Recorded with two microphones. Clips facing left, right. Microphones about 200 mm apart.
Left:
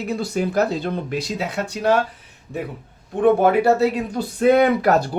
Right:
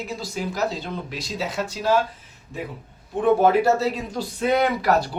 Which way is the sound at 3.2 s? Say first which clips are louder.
Left 2 dB; 60° left (ahead or behind).